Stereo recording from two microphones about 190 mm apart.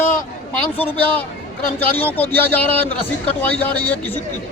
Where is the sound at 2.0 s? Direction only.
10° left (ahead or behind).